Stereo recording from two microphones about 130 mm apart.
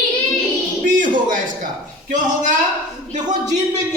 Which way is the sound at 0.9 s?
90° right.